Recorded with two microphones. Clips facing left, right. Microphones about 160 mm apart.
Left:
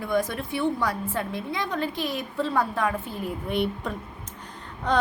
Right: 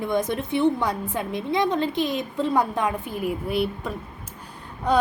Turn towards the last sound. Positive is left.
turn(degrees=-10)  # may be behind; listen again after turning